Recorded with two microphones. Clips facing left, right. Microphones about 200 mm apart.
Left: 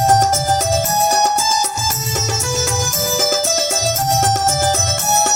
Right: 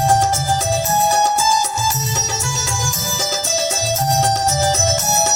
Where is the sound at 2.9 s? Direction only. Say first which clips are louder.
Left 6 dB; 50° left (ahead or behind).